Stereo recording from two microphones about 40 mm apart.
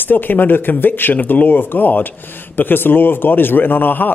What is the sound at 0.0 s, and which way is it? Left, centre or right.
Speech, left.